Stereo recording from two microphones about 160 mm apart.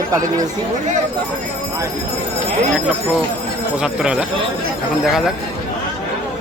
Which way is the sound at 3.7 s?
5° right (ahead or behind).